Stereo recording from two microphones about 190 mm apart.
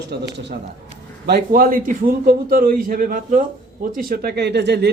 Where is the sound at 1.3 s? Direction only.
50° right (ahead or behind).